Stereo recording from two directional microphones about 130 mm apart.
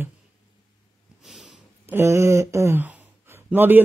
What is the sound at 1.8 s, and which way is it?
Speech, 20° right (ahead or behind).